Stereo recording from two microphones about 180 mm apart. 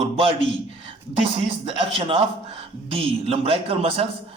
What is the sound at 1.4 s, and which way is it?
A man's voice, 30° right (ahead or behind).